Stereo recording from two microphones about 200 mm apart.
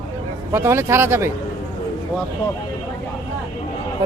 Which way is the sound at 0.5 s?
15° right (ahead or behind).